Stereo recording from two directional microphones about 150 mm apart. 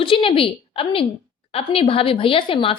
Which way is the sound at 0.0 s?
35° left (ahead or behind).